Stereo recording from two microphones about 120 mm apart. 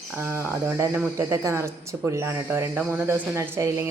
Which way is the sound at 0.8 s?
25° right (ahead or behind).